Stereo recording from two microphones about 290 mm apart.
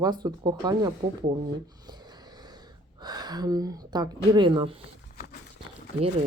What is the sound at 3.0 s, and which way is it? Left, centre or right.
Speech, centre.